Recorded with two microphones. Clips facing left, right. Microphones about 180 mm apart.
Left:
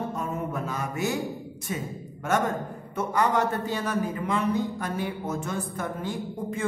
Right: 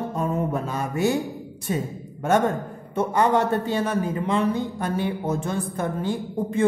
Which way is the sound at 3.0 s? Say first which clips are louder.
Right 4 dB; 30° right (ahead or behind).